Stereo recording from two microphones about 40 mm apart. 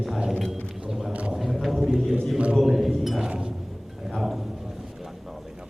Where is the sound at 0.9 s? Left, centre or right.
Centre.